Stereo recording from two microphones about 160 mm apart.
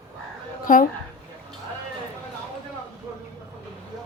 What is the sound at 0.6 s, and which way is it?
Speech, 55° left (ahead or behind).